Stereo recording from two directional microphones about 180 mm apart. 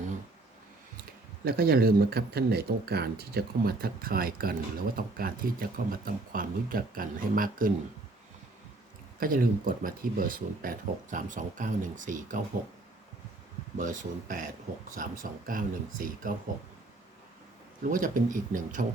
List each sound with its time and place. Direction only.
1.5 s speech: 55° right (ahead or behind)
9.2 s speech: 50° right (ahead or behind)
13.7 s speech: 45° right (ahead or behind)
17.8 s speech: 50° right (ahead or behind)